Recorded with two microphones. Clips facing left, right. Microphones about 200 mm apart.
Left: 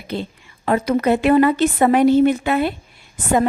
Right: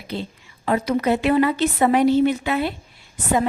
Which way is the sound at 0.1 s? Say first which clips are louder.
Left 3 dB; 55° left (ahead or behind).